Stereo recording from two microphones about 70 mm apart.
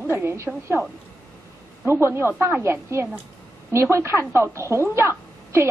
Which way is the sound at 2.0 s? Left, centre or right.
Right.